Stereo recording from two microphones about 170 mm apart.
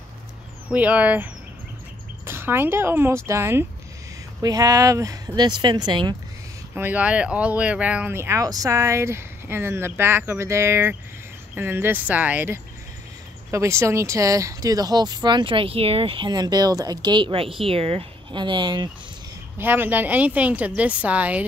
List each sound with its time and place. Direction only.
0.7 s speech: 10° right (ahead or behind); by 6.1 s 25° right (ahead or behind)
6.7 s speech: 10° right (ahead or behind); by 18.9 s 25° right (ahead or behind)
19.6 s speech: 10° right (ahead or behind)